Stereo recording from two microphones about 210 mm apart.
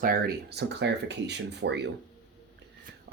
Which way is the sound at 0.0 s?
45° right (ahead or behind).